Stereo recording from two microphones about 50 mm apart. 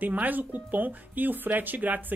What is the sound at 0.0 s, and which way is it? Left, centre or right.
Speech, right.